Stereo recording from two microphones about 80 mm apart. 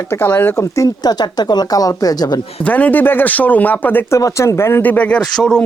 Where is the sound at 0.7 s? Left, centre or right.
Left.